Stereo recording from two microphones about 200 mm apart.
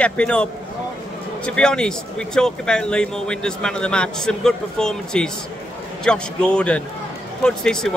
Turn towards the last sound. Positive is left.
turn(degrees=0)  # may be behind; listen again after turning